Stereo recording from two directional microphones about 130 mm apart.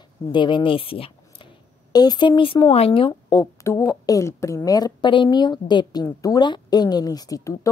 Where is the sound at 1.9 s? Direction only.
35° left (ahead or behind).